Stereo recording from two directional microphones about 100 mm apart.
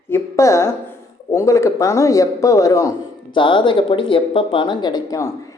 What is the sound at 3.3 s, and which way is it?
Speech, 55° left (ahead or behind).